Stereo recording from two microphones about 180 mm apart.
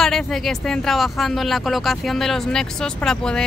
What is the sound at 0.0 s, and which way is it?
Speech, centre (ahead or behind).